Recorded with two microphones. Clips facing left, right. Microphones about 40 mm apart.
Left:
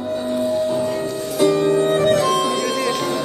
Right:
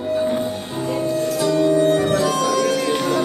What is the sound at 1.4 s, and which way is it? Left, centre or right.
Music, left.